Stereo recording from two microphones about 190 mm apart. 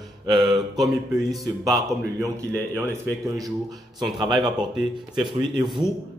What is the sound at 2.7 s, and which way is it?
A man's voice, 15° right (ahead or behind).